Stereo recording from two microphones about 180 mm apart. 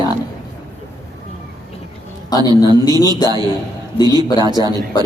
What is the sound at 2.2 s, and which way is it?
Speech, 20° left (ahead or behind).